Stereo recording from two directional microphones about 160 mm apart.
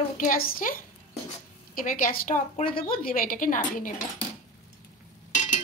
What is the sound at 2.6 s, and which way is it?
Speech, 35° left (ahead or behind).